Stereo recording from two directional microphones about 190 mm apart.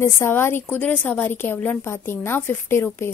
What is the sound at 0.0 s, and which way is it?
A woman's voice, 15° left (ahead or behind).